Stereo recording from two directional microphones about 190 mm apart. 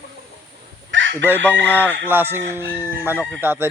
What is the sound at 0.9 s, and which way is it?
Chicken, 75° right (ahead or behind).